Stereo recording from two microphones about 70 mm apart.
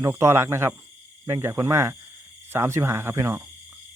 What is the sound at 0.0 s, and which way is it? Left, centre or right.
Speech, right.